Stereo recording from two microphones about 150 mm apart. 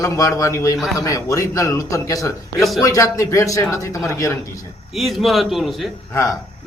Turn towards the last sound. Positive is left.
turn(degrees=20)  # may be behind; listen again after turning